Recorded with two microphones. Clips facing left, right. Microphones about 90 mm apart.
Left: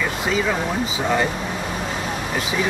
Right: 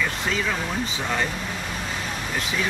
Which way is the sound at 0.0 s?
10° left (ahead or behind).